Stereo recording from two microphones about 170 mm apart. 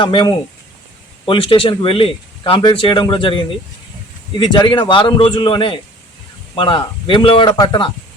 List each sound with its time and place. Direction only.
0.0 s a man's voice: 30° left (ahead or behind)